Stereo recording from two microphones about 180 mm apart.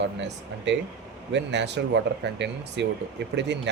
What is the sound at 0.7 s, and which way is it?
Speech, 75° right (ahead or behind).